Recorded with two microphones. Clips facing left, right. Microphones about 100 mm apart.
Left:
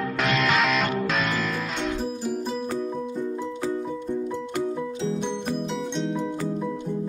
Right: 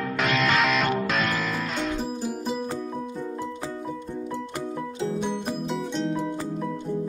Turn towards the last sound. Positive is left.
turn(degrees=0)  # may be behind; listen again after turning